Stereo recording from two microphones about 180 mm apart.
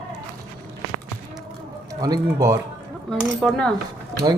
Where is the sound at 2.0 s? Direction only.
20° right (ahead or behind).